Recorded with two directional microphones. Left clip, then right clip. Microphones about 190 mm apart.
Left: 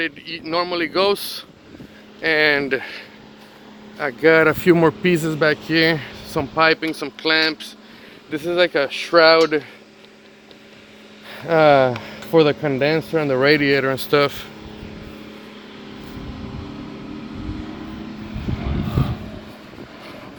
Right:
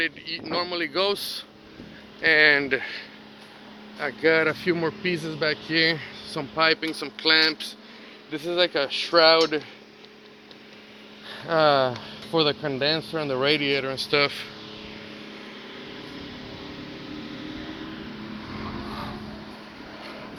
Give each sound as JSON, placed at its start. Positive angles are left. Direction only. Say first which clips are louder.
{"t": 0.4, "sound": "speech", "louder": "left 7 dB", "side_deg": 75}
{"t": 2.2, "sound": "speech", "louder": "left 1 dB", "side_deg": 25}
{"t": 3.9, "sound": "a man's voice", "louder": "left 7 dB", "side_deg": 60}
{"t": 7.2, "sound": "speech", "louder": "left 2 dB", "side_deg": 25}
{"t": 8.3, "sound": "speech", "louder": "left 6 dB", "side_deg": 60}
{"t": 11.3, "sound": "a man's voice", "louder": "left 6 dB", "side_deg": 45}
{"t": 14.1, "sound": "speech", "louder": "left 4 dB", "side_deg": 30}